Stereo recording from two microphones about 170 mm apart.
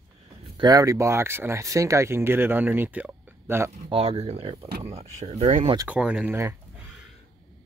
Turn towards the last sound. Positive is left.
turn(degrees=-5)  # may be behind; listen again after turning